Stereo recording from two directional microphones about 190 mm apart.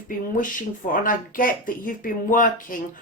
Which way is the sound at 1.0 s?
45° left (ahead or behind).